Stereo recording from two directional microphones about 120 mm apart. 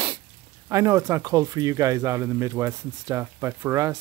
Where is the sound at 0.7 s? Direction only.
25° right (ahead or behind).